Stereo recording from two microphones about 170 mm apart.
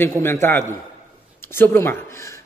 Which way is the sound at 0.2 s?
15° left (ahead or behind).